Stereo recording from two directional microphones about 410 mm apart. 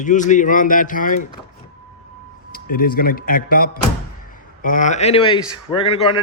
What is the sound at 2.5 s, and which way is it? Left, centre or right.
Speech, left.